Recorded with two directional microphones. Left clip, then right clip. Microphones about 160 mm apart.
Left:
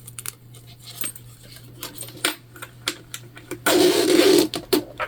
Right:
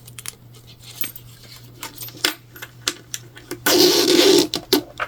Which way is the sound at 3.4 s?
25° right (ahead or behind).